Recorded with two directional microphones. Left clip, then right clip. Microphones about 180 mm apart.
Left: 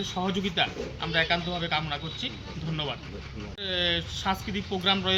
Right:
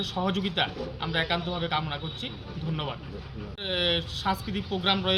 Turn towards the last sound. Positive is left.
turn(degrees=-15)  # may be behind; listen again after turning